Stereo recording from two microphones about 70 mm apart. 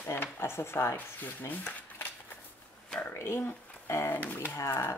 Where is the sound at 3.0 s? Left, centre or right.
Left.